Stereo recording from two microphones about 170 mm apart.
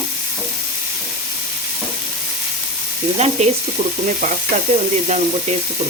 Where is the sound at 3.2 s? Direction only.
40° right (ahead or behind).